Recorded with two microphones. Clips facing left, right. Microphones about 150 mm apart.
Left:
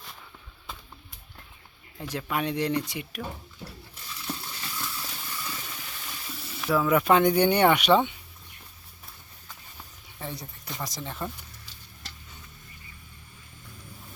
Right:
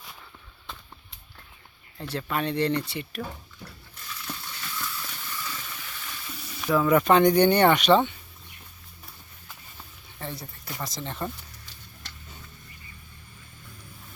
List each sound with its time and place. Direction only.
2.0 s speech: 10° left (ahead or behind)
4.4 s a sound: 30° left (ahead or behind)
5.5 s water: 15° left (ahead or behind)
6.4 s speech: centre (ahead or behind)
10.2 s a sound: 15° left (ahead or behind)
10.4 s speech: centre (ahead or behind)